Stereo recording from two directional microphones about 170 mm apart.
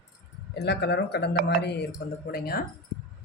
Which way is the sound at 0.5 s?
75° left (ahead or behind).